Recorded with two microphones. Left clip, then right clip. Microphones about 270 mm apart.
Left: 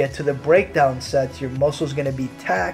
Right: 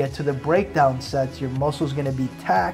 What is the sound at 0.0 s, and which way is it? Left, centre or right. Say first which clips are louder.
Speech: left 3 dB; right.